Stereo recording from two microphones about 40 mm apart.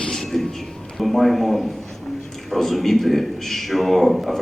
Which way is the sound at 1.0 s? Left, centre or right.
Centre.